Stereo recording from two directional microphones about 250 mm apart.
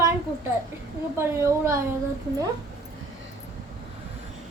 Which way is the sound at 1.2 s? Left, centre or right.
Centre.